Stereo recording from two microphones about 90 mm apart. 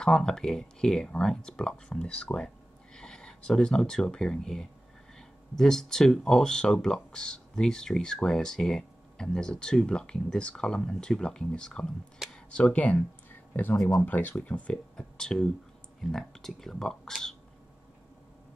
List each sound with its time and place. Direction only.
0.0 s speech: 5° left (ahead or behind)
13.5 s a sound: 20° left (ahead or behind)
13.7 s speech: 5° left (ahead or behind)
14.0 s speech: 20° left (ahead or behind); by 17.4 s 5° left (ahead or behind)